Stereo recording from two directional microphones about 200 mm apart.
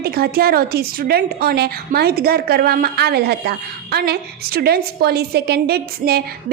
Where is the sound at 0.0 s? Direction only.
50° right (ahead or behind).